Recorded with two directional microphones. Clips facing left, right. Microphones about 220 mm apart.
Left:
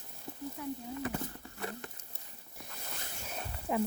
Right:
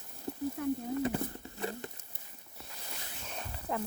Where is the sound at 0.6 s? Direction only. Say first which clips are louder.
Right 6 dB; 50° right (ahead or behind).